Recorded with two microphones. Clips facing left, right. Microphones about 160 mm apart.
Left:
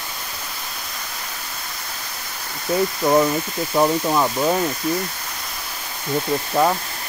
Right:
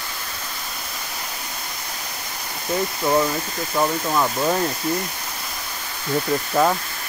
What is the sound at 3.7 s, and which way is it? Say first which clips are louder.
Speech: left 3 dB; 15° left (ahead or behind).